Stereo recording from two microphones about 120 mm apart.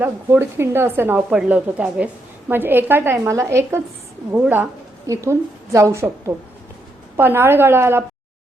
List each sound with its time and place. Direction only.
0.0 s a woman's voice: 20° right (ahead or behind)
5.0 s a woman's voice: 25° right (ahead or behind)